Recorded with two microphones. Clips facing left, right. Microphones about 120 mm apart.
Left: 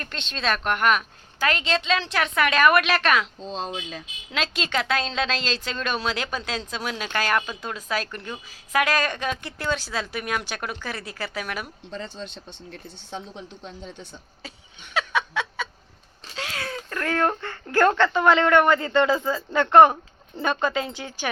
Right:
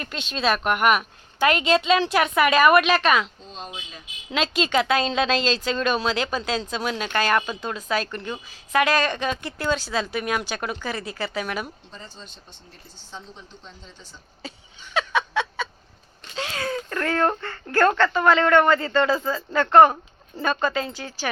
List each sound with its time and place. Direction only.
0.0 s a woman's voice: 10° right (ahead or behind)
3.8 s speech: 90° left
4.3 s a woman's voice: 5° right (ahead or behind)
11.9 s speech: 70° left (ahead or behind)
15.0 s a sound: 5° left (ahead or behind)
16.2 s a sound: centre (ahead or behind)
17.4 s speech: 10° left (ahead or behind)